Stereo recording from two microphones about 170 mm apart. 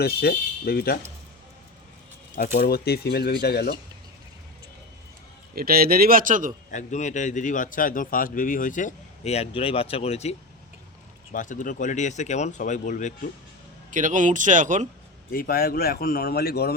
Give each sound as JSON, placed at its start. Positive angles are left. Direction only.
{"t": 0.0, "sound": "speech", "side_deg": 65}
{"t": 2.3, "sound": "speech", "side_deg": 50}
{"t": 2.6, "sound": "speech", "side_deg": 65}
{"t": 5.5, "sound": "speech", "side_deg": -60}
{"t": 6.7, "sound": "a man's voice", "side_deg": 45}
{"t": 11.3, "sound": "a man's voice", "side_deg": 50}
{"t": 13.9, "sound": "speech", "side_deg": -50}
{"t": 15.3, "sound": "speech", "side_deg": 60}